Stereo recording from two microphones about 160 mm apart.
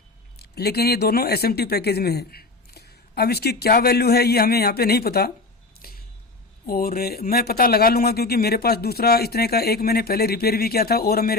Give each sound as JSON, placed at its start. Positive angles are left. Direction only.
{"t": 0.3, "sound": "speech", "side_deg": 80}
{"t": 5.8, "sound": "a sound", "side_deg": 70}
{"t": 6.7, "sound": "speech", "side_deg": 65}